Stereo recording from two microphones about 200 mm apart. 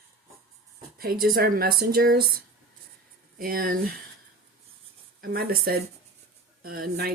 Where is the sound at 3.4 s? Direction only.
45° right (ahead or behind).